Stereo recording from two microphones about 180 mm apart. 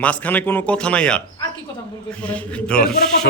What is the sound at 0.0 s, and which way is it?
A man's voice, 10° left (ahead or behind).